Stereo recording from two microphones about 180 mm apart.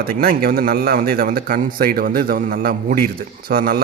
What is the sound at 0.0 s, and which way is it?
A man's voice, 55° right (ahead or behind).